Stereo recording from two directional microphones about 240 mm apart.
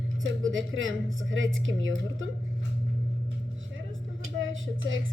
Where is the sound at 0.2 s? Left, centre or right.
Right.